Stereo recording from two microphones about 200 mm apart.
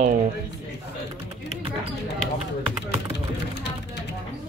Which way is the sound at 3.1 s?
55° left (ahead or behind).